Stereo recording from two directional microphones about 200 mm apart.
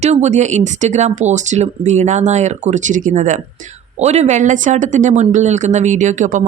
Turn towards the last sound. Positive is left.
turn(degrees=-40)  # may be behind; listen again after turning